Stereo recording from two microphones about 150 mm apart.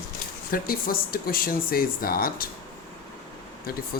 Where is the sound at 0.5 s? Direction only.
75° left (ahead or behind).